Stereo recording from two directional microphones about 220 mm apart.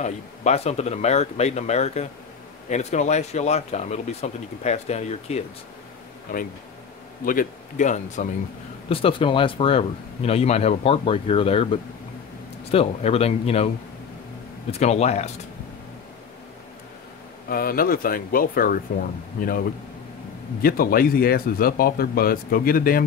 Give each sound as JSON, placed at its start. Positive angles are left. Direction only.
{"t": 0.0, "sound": "speech", "side_deg": 30}
{"t": 7.2, "sound": "a man's voice", "side_deg": 35}
{"t": 14.7, "sound": "a man's voice", "side_deg": 30}
{"t": 17.5, "sound": "speech", "side_deg": 40}
{"t": 20.6, "sound": "speech", "side_deg": 40}